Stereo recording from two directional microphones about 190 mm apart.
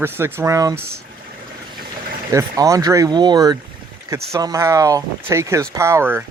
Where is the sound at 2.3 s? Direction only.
15° right (ahead or behind).